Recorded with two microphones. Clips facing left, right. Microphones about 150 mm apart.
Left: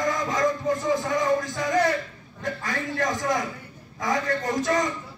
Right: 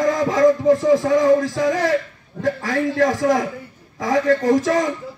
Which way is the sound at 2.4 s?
80° right.